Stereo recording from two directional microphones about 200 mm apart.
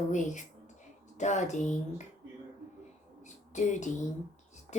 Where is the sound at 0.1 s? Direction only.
40° left (ahead or behind).